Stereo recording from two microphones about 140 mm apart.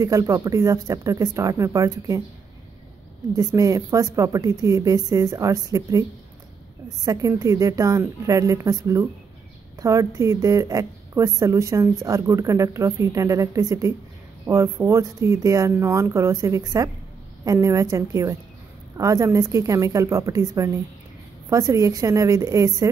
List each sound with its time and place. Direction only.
0.0 s a woman's voice: 25° right (ahead or behind)
3.3 s a woman's voice: 25° right (ahead or behind)
7.1 s a woman's voice: 25° right (ahead or behind)